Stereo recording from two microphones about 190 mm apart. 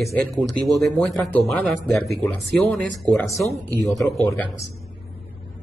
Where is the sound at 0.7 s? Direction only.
Centre (ahead or behind).